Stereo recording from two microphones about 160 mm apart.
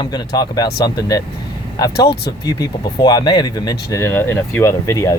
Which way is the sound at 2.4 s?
20° left (ahead or behind).